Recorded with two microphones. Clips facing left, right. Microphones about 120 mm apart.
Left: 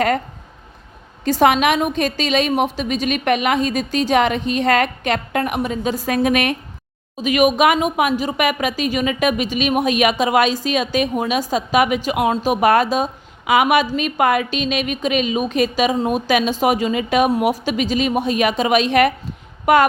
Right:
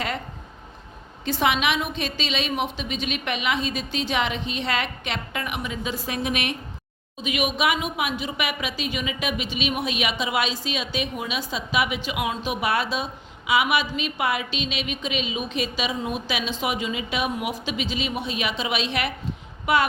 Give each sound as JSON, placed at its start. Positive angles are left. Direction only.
{"t": 1.2, "sound": "a woman's voice", "side_deg": 45}